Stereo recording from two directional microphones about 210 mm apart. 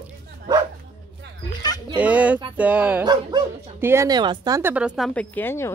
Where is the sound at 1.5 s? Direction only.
20° left (ahead or behind).